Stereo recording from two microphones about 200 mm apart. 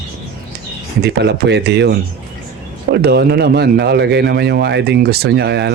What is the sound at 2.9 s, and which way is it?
A man's voice, 50° right (ahead or behind).